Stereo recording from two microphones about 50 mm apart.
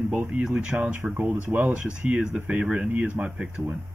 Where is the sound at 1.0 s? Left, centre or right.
Right.